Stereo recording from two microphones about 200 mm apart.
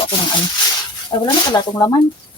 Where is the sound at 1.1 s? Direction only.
25° left (ahead or behind).